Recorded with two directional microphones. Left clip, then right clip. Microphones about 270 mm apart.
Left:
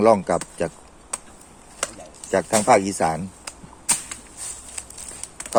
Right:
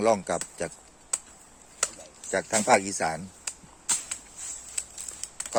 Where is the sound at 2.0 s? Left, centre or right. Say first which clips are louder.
Left 10 dB; centre.